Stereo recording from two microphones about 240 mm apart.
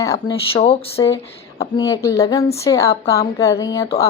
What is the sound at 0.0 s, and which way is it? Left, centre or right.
Speech, centre.